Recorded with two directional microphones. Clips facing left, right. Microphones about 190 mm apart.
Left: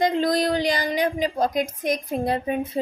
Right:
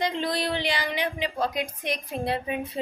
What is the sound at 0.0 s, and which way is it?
A woman's voice, 45° left (ahead or behind).